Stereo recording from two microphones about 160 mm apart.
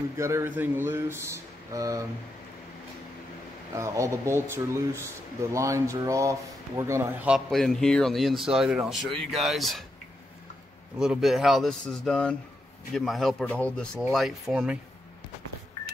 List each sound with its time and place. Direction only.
0.2 s speech: 15° right (ahead or behind)
3.7 s speech: 20° right (ahead or behind)
5.5 s speech: 20° right (ahead or behind); by 9.8 s centre (ahead or behind)
11.0 s speech: centre (ahead or behind)